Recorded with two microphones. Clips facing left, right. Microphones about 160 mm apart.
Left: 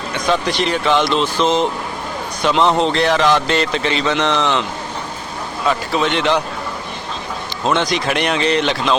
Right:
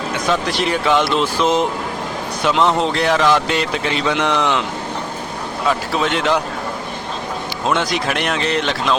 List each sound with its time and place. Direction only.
0.1 s speech: 5° right (ahead or behind)
5.6 s speech: 5° right (ahead or behind)
7.7 s speech: 5° right (ahead or behind)